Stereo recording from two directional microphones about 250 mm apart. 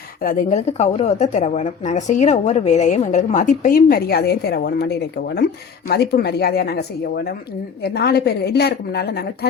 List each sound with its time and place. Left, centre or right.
0.2 s a woman's voice: left